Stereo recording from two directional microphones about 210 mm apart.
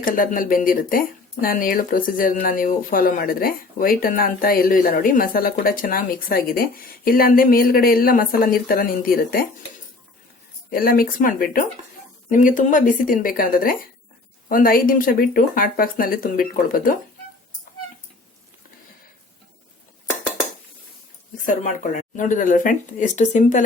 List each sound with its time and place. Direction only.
0.0 s speech: 40° left (ahead or behind)
10.7 s speech: 45° left (ahead or behind)
21.4 s speech: 35° left (ahead or behind)